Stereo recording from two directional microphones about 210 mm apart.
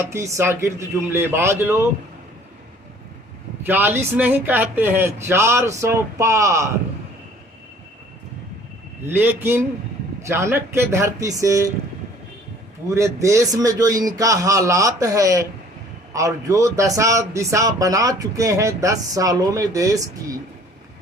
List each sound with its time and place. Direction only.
0.0 s a man's voice: 15° right (ahead or behind)
3.7 s a man's voice: 10° right (ahead or behind)
9.0 s a man's voice: 10° right (ahead or behind)
12.9 s a man's voice: 15° right (ahead or behind)